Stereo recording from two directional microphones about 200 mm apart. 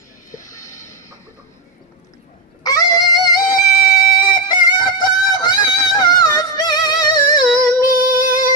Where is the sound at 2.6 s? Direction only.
20° left (ahead or behind).